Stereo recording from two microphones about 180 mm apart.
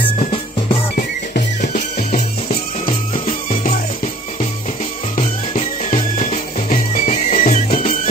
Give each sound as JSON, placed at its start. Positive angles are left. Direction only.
{"t": 0.9, "sound": "music", "side_deg": 50}
{"t": 5.1, "sound": "music", "side_deg": 40}